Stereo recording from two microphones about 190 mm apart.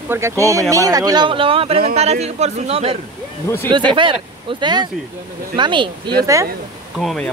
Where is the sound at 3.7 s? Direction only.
25° right (ahead or behind).